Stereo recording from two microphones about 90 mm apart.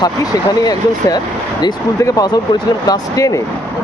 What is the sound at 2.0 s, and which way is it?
Speech, 35° left (ahead or behind).